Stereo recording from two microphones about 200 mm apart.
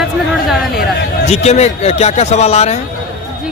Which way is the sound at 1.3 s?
35° left (ahead or behind).